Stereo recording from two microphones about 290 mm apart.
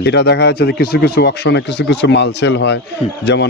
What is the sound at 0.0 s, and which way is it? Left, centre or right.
Speech, left.